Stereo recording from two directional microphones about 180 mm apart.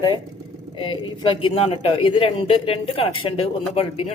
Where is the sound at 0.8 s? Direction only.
25° left (ahead or behind).